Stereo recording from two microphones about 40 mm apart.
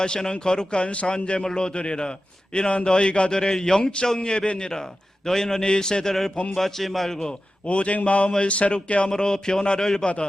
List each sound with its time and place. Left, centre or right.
0.0 s a man's voice: left
6.6 s a man's voice: centre
7.7 s speech: left
9.1 s a man's voice: centre